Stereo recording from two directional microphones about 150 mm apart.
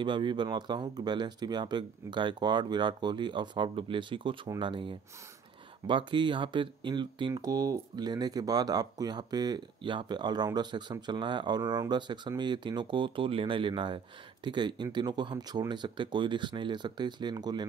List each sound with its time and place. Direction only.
0.0 s speech: 30° right (ahead or behind)